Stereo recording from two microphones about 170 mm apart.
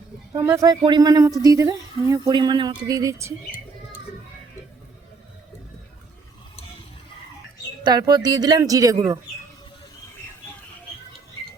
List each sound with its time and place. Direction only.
0.3 s speech: 20° right (ahead or behind)
7.9 s speech: 25° right (ahead or behind)